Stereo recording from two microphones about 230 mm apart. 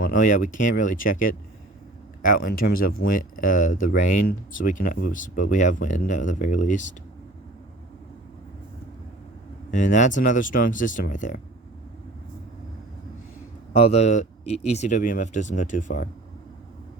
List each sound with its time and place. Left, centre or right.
0.0 s speech: left
9.7 s speech: left
13.7 s speech: left